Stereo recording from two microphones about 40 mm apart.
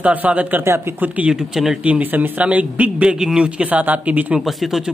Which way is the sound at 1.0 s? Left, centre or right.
Right.